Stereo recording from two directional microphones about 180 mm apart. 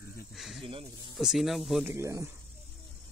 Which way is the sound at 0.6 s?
30° right (ahead or behind).